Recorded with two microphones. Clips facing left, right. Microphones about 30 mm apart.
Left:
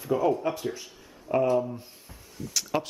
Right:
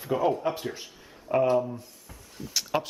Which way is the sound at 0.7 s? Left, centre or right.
Centre.